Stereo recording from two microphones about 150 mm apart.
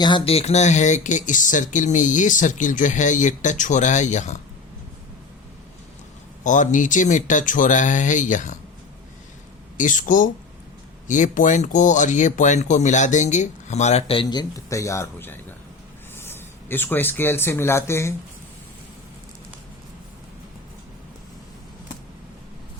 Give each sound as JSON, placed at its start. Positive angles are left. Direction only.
{"t": 0.0, "sound": "speech", "side_deg": 35}
{"t": 6.4, "sound": "speech", "side_deg": 55}
{"t": 9.7, "sound": "speech", "side_deg": 60}